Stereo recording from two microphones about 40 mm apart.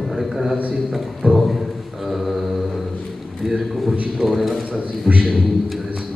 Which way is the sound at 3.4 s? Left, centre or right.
Centre.